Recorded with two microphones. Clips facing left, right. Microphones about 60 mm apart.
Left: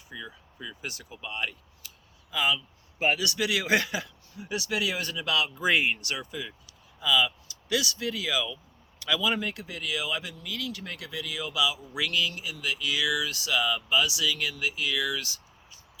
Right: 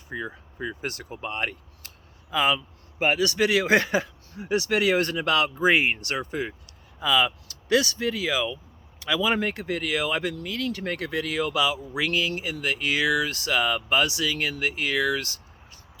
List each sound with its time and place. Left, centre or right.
0.1 s speech: right
5.5 s speech: right
9.3 s speech: right